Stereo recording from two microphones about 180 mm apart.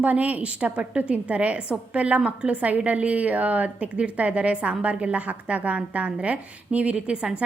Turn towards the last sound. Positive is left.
turn(degrees=-5)  # may be behind; listen again after turning